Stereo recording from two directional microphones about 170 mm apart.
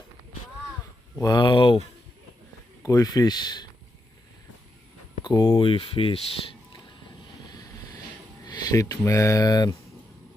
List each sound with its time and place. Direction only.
1.2 s speech: 25° left (ahead or behind)
2.8 s speech: 20° left (ahead or behind)
5.2 s speech: 25° left (ahead or behind)
7.4 s vehicle: 20° left (ahead or behind)
8.4 s speech: 20° left (ahead or behind)